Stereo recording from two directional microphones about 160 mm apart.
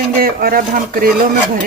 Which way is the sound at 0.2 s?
65° right (ahead or behind).